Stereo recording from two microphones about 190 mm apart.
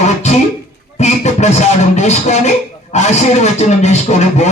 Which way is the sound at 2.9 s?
35° left (ahead or behind).